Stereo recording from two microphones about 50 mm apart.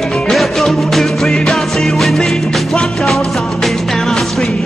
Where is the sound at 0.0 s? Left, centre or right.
Centre.